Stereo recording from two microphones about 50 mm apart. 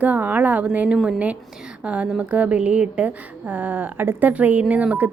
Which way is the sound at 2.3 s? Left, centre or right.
Right.